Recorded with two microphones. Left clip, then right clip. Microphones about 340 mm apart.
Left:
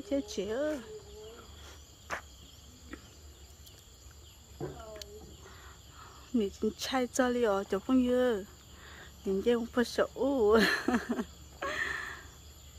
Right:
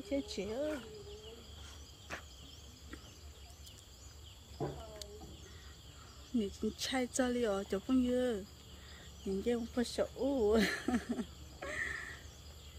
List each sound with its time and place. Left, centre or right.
0.1 s speech: centre
4.6 s a sound: right
6.3 s speech: centre